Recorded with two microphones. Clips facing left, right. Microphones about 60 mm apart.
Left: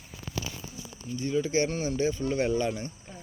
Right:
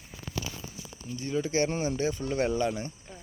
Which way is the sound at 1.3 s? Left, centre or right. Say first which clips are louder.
Left 1 dB; centre.